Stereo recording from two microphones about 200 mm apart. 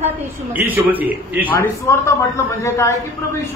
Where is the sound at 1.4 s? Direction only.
10° left (ahead or behind).